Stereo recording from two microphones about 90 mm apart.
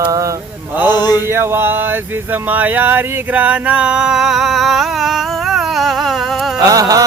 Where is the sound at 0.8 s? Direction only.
50° left (ahead or behind).